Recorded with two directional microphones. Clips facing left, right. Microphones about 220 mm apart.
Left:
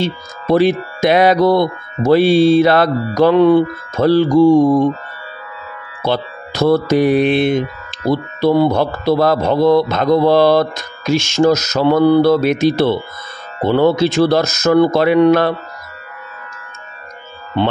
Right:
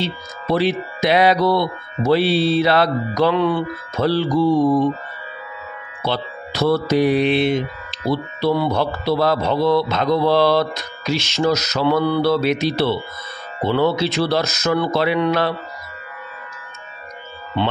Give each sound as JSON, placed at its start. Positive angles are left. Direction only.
{"t": 0.0, "sound": "speech", "side_deg": 50}
{"t": 6.0, "sound": "speech", "side_deg": 45}